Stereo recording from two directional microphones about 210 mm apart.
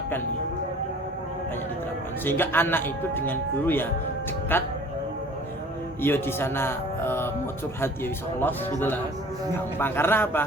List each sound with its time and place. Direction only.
2.2 s speech: 10° left (ahead or behind)
6.0 s speech: 10° left (ahead or behind)